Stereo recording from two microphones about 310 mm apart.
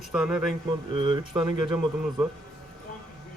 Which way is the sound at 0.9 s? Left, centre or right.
Centre.